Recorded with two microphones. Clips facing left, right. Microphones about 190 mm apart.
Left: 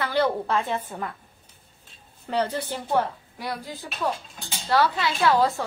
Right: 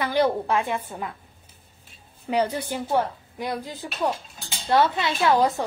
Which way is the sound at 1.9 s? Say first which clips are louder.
Right 3 dB; 15° right (ahead or behind).